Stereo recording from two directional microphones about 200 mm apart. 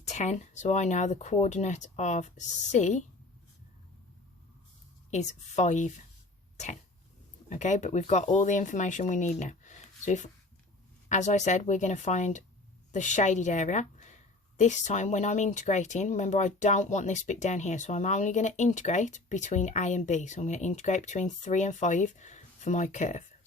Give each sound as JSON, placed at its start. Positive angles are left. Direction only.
{"t": 0.0, "sound": "a woman's voice", "side_deg": 35}
{"t": 5.1, "sound": "a woman's voice", "side_deg": 35}
{"t": 7.5, "sound": "a woman's voice", "side_deg": 40}